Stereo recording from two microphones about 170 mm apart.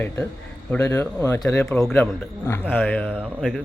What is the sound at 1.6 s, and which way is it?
Speech, 5° left (ahead or behind).